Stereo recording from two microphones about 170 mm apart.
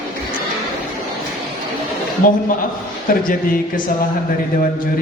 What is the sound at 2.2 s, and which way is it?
A man's voice, 55° left (ahead or behind).